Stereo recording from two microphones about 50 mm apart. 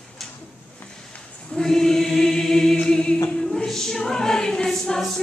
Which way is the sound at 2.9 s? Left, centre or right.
Centre.